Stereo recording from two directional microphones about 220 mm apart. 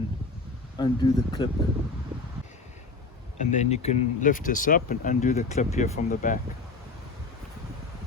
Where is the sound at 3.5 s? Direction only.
30° left (ahead or behind).